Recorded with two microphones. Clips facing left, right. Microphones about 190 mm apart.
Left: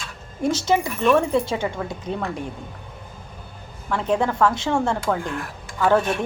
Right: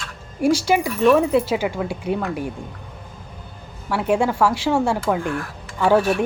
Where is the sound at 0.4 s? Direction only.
10° right (ahead or behind).